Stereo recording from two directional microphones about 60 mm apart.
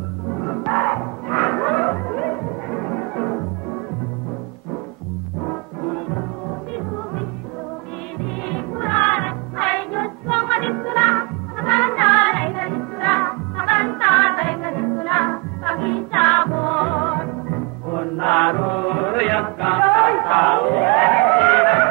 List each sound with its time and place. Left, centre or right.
0.3 s music: left
5.4 s music: left
8.2 s music: centre